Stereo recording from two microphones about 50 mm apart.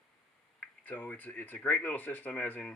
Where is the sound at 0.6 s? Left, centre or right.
Left.